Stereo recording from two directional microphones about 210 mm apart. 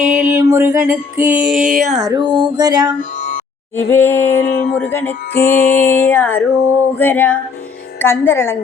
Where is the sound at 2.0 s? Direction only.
20° right (ahead or behind).